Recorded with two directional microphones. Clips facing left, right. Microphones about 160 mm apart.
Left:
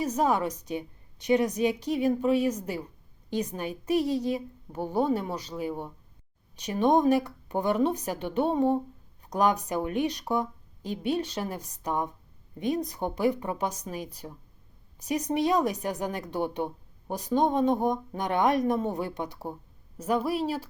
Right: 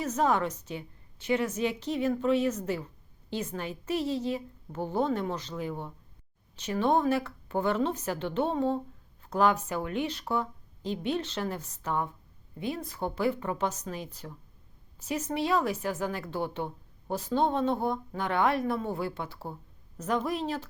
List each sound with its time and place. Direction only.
0.0 s a woman's voice: 10° left (ahead or behind)